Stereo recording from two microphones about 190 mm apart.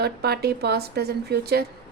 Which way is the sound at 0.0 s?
55° right (ahead or behind).